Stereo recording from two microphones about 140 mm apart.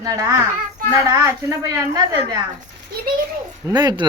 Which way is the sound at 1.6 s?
25° right (ahead or behind).